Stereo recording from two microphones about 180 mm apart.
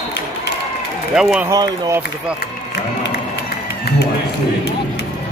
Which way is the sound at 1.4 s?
20° right (ahead or behind).